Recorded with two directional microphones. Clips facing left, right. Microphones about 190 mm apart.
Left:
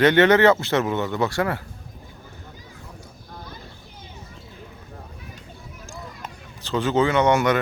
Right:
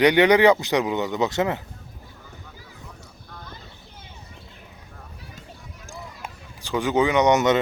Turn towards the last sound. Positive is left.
turn(degrees=-20)  # may be behind; listen again after turning